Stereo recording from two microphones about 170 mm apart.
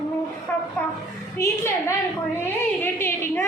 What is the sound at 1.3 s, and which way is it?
A woman's voice, 15° left (ahead or behind).